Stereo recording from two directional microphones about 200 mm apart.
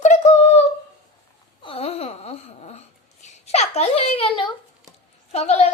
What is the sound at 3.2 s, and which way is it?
A child's voice, 30° left (ahead or behind).